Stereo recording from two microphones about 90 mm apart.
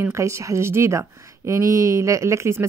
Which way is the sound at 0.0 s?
35° right (ahead or behind).